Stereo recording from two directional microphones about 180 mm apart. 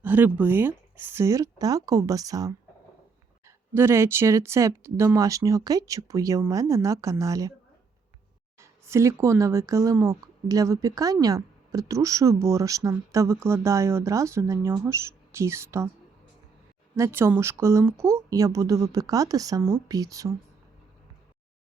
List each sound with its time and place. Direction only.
0.0 s speech: 10° right (ahead or behind)
8.5 s speech: 15° right (ahead or behind)
17.0 s speech: 15° right (ahead or behind)